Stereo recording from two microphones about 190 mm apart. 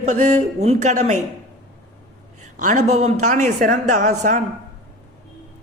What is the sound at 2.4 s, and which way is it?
A woman's voice, 40° right (ahead or behind).